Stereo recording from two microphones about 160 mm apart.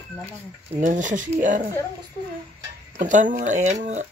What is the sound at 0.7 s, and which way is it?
Speech, 50° right (ahead or behind).